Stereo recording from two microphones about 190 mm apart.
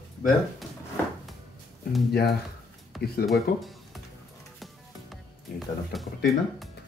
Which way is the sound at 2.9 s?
Centre (ahead or behind).